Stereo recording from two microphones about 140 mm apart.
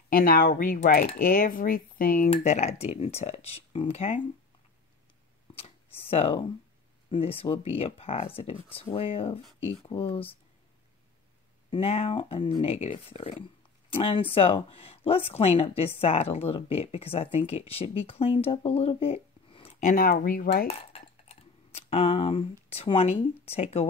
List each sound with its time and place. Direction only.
0.1 s speech: 90° left
2.2 s a woman's voice: 50° left (ahead or behind)
5.6 s a sound: 45° left (ahead or behind)
7.1 s a woman's voice: 40° left (ahead or behind)
11.7 s a woman's voice: 45° left (ahead or behind)
19.8 s speech: 80° left
20.6 s speech: 45° left (ahead or behind)